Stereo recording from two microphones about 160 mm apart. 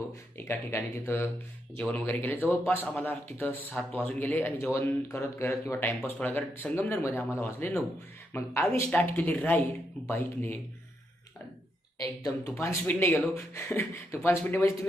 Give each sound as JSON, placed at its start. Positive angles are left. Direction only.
{"t": 0.3, "sound": "speech", "side_deg": 15}
{"t": 12.2, "sound": "speech", "side_deg": 20}